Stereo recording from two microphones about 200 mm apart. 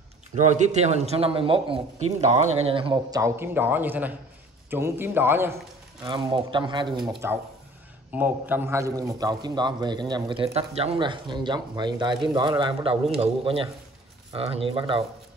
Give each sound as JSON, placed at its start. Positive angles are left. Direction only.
{"t": 0.4, "sound": "a man's voice", "side_deg": -35}
{"t": 6.0, "sound": "a man's voice", "side_deg": -25}
{"t": 7.2, "sound": "a man's voice", "side_deg": -10}